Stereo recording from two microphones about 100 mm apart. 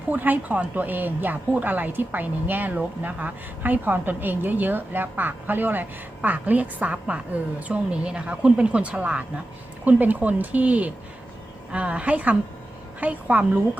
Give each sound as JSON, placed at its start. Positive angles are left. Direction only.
{"t": 0.1, "sound": "speech", "side_deg": -15}